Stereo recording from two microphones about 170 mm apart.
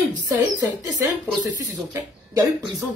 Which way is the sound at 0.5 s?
20° right (ahead or behind).